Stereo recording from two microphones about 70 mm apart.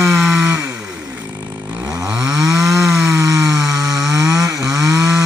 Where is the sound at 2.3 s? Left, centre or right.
Centre.